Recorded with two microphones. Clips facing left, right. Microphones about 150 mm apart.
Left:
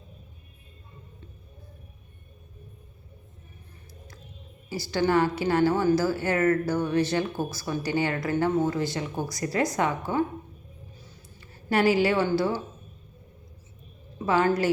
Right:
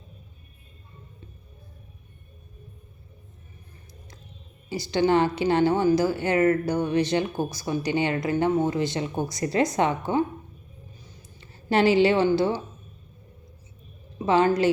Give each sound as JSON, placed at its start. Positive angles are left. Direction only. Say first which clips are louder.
{"t": 4.7, "sound": "a woman's voice", "louder": "right 2 dB", "side_deg": -20}
{"t": 11.3, "sound": "speech", "louder": "right 3 dB", "side_deg": -25}
{"t": 14.3, "sound": "a woman's voice", "louder": "right 3 dB", "side_deg": -20}